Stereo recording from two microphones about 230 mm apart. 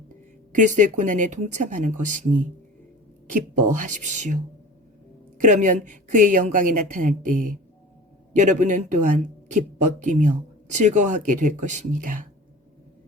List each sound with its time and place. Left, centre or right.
0.5 s speech: right
3.3 s speech: right
5.4 s speech: right